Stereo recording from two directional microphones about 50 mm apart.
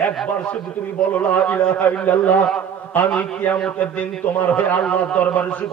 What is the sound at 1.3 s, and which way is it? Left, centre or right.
A man's voice, left.